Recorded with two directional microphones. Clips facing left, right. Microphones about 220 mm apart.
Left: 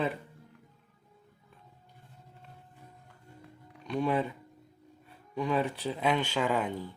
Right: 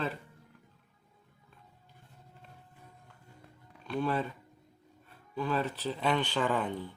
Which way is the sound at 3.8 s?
15° left (ahead or behind).